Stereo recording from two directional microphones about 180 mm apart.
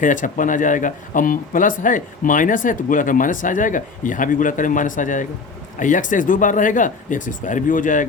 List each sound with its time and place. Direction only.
0.0 s speech: 45° left (ahead or behind)